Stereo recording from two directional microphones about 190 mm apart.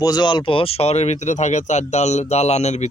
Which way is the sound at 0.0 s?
20° left (ahead or behind).